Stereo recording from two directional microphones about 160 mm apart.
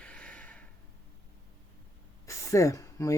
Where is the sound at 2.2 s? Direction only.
20° left (ahead or behind).